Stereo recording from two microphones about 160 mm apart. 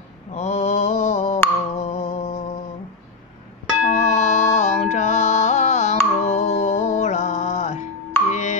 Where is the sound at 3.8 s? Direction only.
50° left (ahead or behind).